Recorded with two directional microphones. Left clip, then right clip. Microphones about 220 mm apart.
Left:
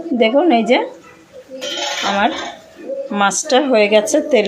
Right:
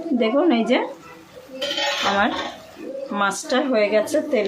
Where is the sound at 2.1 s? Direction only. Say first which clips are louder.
Left 4 dB; 10° left (ahead or behind).